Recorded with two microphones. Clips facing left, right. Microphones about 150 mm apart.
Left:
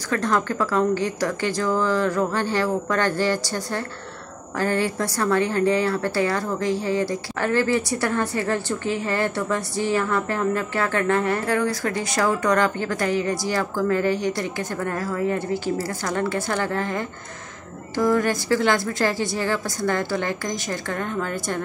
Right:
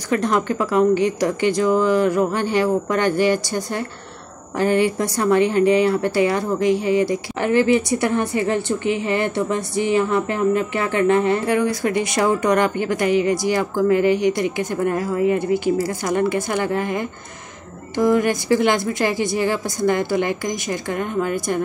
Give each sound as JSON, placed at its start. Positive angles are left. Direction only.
{"t": 0.1, "sound": "speech", "side_deg": -20}